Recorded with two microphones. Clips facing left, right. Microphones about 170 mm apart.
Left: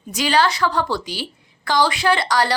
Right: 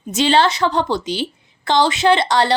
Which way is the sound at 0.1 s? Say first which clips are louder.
Right 3 dB; 25° right (ahead or behind).